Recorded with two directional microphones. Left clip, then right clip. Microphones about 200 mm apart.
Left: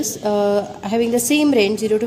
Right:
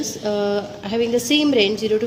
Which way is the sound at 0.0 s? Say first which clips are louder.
Left 3 dB; 40° left (ahead or behind).